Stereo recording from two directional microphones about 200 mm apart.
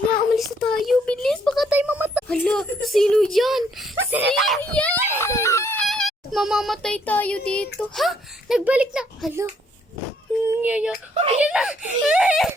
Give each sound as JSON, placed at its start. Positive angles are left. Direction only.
{"t": 0.3, "sound": "a sound", "side_deg": 0}
{"t": 2.2, "sound": "speech", "side_deg": 5}
{"t": 4.1, "sound": "screaming", "side_deg": -5}
{"t": 5.8, "sound": "speech", "side_deg": 0}
{"t": 10.4, "sound": "a sound", "side_deg": -10}
{"t": 11.1, "sound": "speech", "side_deg": -30}
{"t": 11.3, "sound": "speech", "side_deg": -5}